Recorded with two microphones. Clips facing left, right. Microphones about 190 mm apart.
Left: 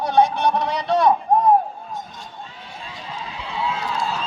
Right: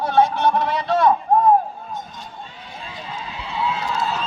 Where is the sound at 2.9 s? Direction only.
Centre (ahead or behind).